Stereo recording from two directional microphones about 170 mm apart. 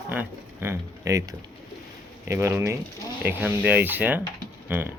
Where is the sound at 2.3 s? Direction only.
15° right (ahead or behind).